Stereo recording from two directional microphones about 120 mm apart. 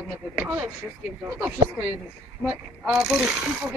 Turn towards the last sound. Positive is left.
turn(degrees=-5)  # may be behind; listen again after turning